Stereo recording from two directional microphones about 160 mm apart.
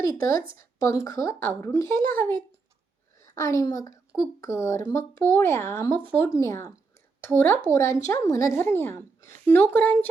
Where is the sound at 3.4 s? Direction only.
20° left (ahead or behind).